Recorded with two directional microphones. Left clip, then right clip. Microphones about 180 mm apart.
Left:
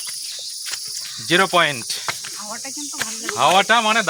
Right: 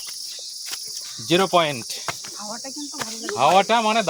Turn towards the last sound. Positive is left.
turn(degrees=-5)  # may be behind; listen again after turning